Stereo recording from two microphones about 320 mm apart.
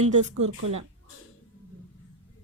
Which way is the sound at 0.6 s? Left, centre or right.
Right.